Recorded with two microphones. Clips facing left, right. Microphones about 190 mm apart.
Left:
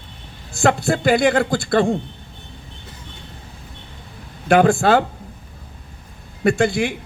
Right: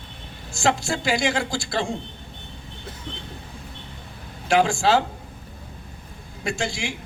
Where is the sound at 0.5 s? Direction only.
60° left (ahead or behind).